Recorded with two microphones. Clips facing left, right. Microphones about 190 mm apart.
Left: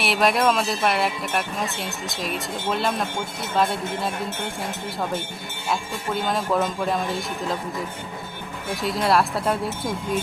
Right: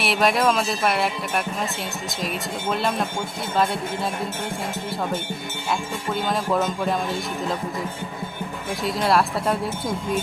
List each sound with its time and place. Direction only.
0.0 s speech: centre (ahead or behind)
6.1 s speech: centre (ahead or behind)
8.7 s speech: centre (ahead or behind)